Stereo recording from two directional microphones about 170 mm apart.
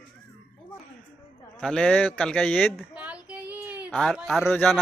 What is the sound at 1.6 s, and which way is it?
A man's voice, 5° left (ahead or behind).